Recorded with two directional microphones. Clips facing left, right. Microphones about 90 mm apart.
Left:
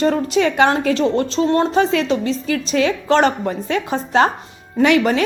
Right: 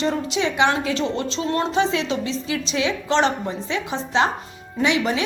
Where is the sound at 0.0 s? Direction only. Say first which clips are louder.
Left 6 dB; 45° left (ahead or behind).